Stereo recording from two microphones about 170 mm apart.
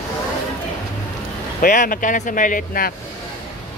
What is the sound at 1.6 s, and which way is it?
Speech, 55° left (ahead or behind).